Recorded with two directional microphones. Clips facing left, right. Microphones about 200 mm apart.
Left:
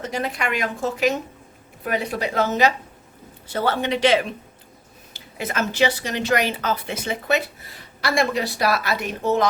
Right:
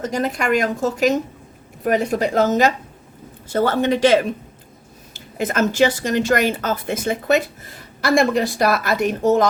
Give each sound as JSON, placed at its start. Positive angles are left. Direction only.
{"t": 0.0, "sound": "speech", "side_deg": -45}